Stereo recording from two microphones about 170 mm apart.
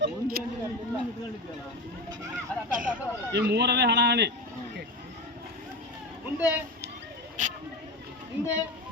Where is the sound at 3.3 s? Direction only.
80° right.